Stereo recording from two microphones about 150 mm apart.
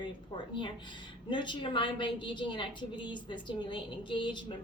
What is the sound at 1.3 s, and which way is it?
A woman's voice, 30° left (ahead or behind).